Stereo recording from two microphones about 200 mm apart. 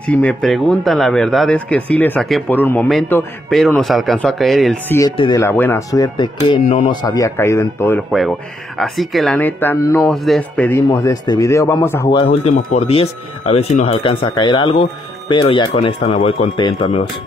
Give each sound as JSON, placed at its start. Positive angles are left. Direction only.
{"t": 0.1, "sound": "a man's voice", "side_deg": 5}
{"t": 5.1, "sound": "speech", "side_deg": 25}
{"t": 5.4, "sound": "speech", "side_deg": 10}
{"t": 8.1, "sound": "a man's voice", "side_deg": 0}
{"t": 10.9, "sound": "speech", "side_deg": 20}
{"t": 12.1, "sound": "speech", "side_deg": 30}